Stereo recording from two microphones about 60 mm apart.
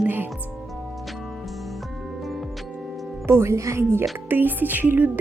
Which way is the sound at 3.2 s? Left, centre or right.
Right.